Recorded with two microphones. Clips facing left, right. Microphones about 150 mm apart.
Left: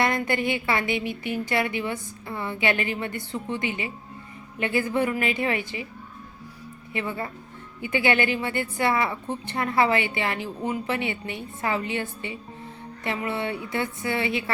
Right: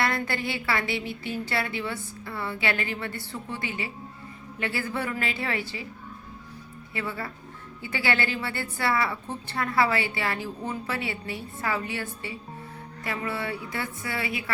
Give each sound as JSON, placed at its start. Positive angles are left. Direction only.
{"t": 0.0, "sound": "a woman's voice", "side_deg": 20}
{"t": 6.9, "sound": "a woman's voice", "side_deg": 20}